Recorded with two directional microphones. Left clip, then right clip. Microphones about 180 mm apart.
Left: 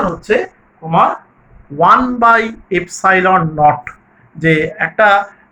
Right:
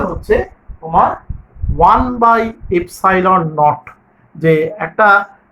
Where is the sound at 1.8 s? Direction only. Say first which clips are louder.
Even; 50° right (ahead or behind).